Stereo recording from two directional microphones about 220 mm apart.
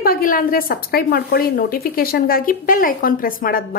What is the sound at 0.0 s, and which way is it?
A woman's voice, 40° left (ahead or behind).